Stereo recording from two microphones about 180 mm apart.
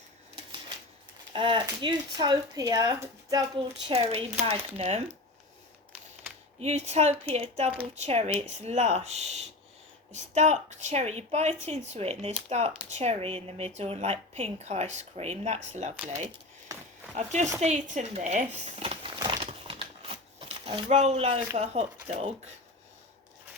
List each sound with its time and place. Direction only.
1.3 s speech: 25° right (ahead or behind)
3.8 s a woman's voice: 35° right (ahead or behind)
6.6 s a woman's voice: 35° right (ahead or behind)
17.2 s a woman's voice: 40° right (ahead or behind)
19.2 s crumpling: 30° right (ahead or behind)
20.9 s a woman's voice: 40° right (ahead or behind)